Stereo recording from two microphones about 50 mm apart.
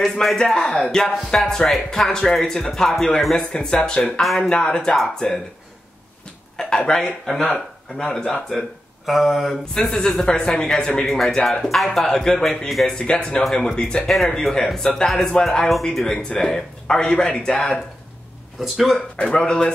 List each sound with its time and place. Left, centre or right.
0.0 s speech: centre
3.5 s speech: centre
4.2 s speech: centre
4.5 s speech: centre
6.8 s speech: centre
9.5 s speech: centre
11.1 s speech: centre
12.9 s speech: centre
14.1 s speech: centre
18.6 s speech: centre
19.3 s speech: centre